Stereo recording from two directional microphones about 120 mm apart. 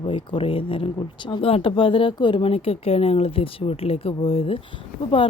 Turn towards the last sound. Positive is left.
turn(degrees=45)  # may be behind; listen again after turning